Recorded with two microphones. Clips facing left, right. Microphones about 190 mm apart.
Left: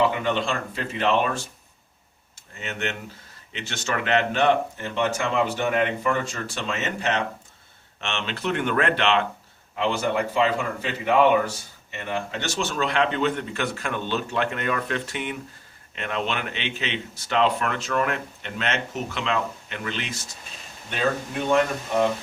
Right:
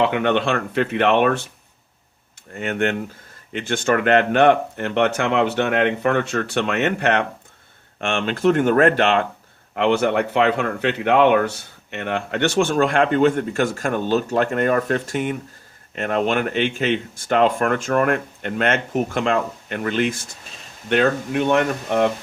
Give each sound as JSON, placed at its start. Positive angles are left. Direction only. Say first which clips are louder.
{"t": 0.0, "sound": "speech", "louder": "right 4 dB", "side_deg": -65}
{"t": 2.5, "sound": "speech", "louder": "right 9 dB", "side_deg": -55}
{"t": 8.0, "sound": "speech", "louder": "right 10 dB", "side_deg": -50}
{"t": 9.7, "sound": "speech", "louder": "right 6 dB", "side_deg": -65}
{"t": 20.9, "sound": "speech", "louder": "right 7 dB", "side_deg": -65}